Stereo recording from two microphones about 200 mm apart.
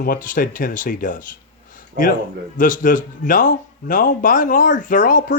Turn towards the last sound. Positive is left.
turn(degrees=40)  # may be behind; listen again after turning